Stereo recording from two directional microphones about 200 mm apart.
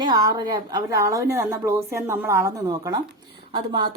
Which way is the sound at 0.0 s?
20° right (ahead or behind).